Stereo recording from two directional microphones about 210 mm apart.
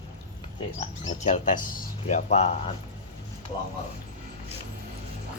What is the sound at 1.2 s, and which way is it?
Speech, 35° left (ahead or behind).